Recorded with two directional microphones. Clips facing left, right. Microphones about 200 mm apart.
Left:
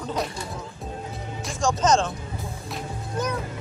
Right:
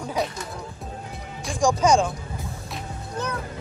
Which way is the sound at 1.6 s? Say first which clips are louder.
Right 2 dB; 10° right (ahead or behind).